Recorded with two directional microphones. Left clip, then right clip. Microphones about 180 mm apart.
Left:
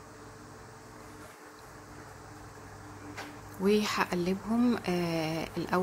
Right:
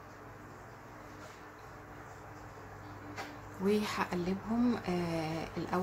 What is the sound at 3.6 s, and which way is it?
Speech, 30° left (ahead or behind).